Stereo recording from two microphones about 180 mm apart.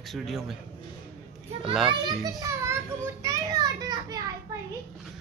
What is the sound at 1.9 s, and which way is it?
Children playing, 20° right (ahead or behind).